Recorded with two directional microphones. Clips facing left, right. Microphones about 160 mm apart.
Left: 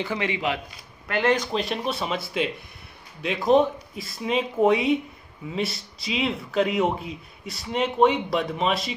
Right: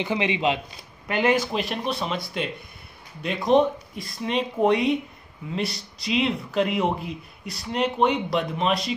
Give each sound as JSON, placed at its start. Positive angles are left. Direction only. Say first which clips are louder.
{"t": 0.0, "sound": "a man's voice", "louder": "right 3 dB", "side_deg": -20}